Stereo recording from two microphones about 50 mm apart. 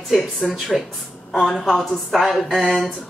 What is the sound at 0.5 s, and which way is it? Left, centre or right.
A woman's voice, centre.